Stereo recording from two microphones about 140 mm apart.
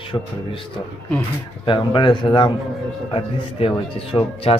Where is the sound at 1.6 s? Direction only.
35° left (ahead or behind).